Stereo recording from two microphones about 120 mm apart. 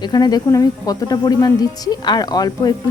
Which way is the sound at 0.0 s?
35° left (ahead or behind).